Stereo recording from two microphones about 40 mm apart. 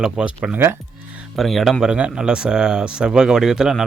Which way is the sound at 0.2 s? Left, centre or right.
Centre.